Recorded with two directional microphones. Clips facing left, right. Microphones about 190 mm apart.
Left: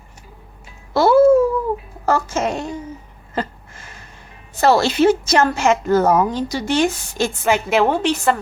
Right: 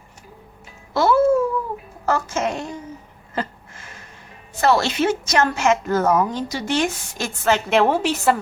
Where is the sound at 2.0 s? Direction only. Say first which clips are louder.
Left 2 dB; 35° left (ahead or behind).